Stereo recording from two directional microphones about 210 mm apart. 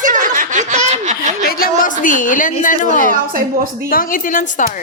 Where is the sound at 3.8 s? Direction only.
40° left (ahead or behind).